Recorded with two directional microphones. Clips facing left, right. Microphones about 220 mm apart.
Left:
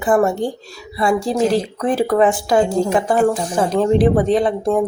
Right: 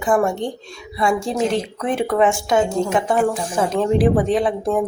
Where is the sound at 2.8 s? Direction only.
35° left (ahead or behind).